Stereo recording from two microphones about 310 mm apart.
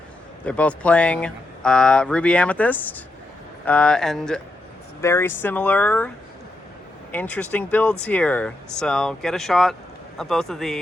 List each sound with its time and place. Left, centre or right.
0.4 s speech: centre
7.1 s speech: centre